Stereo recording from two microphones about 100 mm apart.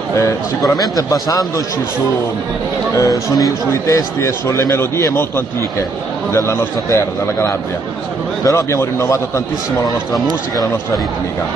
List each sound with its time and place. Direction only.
0.1 s a man's voice: 35° left (ahead or behind)
3.0 s speech: 35° left (ahead or behind)
6.3 s speech: 30° left (ahead or behind)